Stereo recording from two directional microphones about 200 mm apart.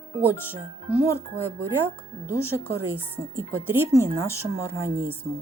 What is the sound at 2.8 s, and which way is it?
Music, 10° right (ahead or behind).